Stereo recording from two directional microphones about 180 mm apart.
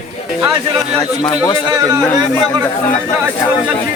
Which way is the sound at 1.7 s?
20° right (ahead or behind).